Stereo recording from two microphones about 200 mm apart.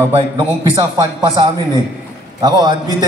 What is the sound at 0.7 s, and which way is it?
Speech, 20° right (ahead or behind).